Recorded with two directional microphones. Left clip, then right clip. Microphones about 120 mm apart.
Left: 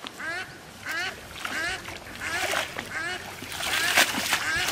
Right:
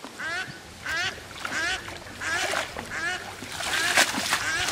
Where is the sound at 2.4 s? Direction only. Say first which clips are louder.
Left 3 dB; 5° right (ahead or behind).